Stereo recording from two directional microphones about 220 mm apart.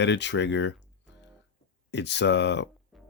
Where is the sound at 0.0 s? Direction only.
55° left (ahead or behind).